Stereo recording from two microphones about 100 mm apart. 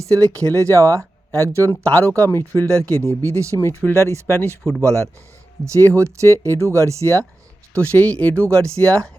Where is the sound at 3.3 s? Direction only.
30° right (ahead or behind).